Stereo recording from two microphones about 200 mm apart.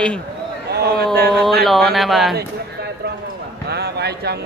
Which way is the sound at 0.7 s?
55° right (ahead or behind).